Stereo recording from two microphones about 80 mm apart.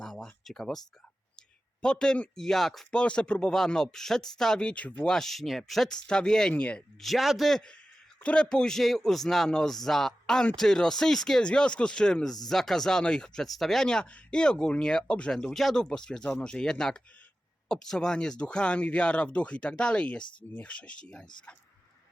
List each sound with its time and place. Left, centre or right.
0.0 s a sound: centre
0.4 s a man's voice: centre
1.4 s a sound: centre
2.4 s speech: centre
6.5 s speech: centre
7.0 s a man's voice: centre